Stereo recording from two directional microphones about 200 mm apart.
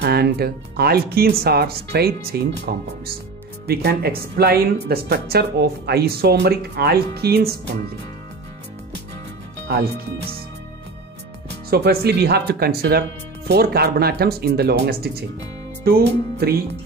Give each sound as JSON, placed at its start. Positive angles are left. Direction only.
{"t": 0.0, "sound": "speech", "side_deg": -50}
{"t": 9.7, "sound": "speech", "side_deg": -55}
{"t": 11.7, "sound": "speech", "side_deg": -50}
{"t": 16.1, "sound": "speech", "side_deg": -50}